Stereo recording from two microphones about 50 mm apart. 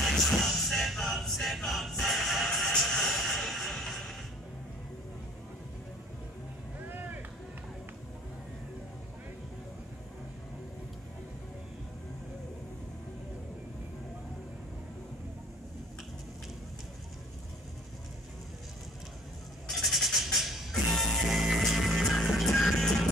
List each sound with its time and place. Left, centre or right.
0.0 s music: centre
6.9 s a sound: right
19.7 s music: centre